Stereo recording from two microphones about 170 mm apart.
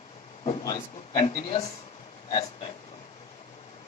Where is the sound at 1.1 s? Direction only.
30° left (ahead or behind).